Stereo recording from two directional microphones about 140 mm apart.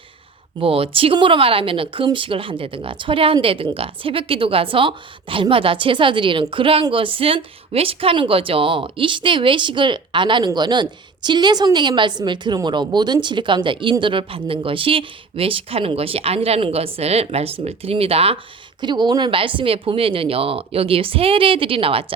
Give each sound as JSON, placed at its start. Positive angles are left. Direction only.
{"t": 0.6, "sound": "speech", "side_deg": -40}
{"t": 18.8, "sound": "speech", "side_deg": -30}